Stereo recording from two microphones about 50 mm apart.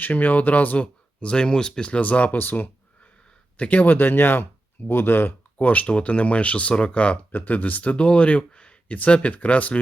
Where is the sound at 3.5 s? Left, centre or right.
Left.